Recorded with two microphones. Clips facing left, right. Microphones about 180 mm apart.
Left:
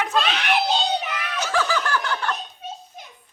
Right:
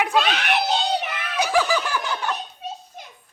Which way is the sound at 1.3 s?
15° right (ahead or behind).